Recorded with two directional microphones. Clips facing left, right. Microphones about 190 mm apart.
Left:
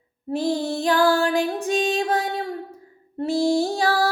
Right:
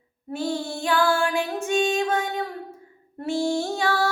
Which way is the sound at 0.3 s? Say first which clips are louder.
Left 5 dB; 35° left (ahead or behind).